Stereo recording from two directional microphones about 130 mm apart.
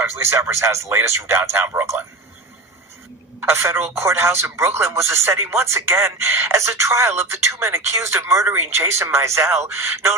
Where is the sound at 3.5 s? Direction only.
20° right (ahead or behind).